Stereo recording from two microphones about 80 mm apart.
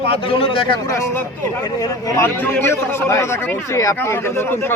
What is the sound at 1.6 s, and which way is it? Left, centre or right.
Speech, left.